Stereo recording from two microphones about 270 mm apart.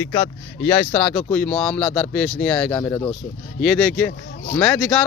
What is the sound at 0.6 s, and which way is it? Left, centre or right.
Speech, centre.